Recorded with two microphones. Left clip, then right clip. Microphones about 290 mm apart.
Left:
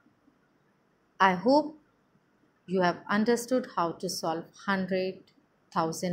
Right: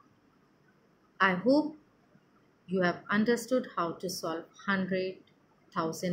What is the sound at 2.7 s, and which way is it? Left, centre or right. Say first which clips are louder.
Speech: left 3 dB; left.